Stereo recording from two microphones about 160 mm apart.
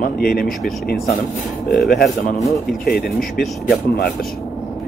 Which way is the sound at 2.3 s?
Centre (ahead or behind).